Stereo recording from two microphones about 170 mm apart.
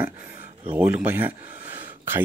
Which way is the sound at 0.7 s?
10° right (ahead or behind).